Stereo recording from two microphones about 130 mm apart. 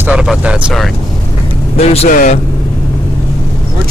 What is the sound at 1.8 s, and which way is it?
Speech, 50° left (ahead or behind).